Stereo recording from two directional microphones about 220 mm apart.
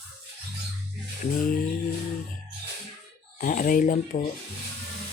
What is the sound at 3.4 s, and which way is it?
Speech, 40° left (ahead or behind).